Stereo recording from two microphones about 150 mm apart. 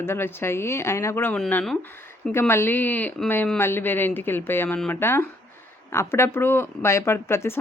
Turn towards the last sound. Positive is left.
turn(degrees=15)  # may be behind; listen again after turning